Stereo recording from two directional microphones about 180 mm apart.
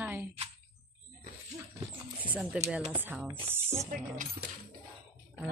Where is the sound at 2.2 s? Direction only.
5° right (ahead or behind).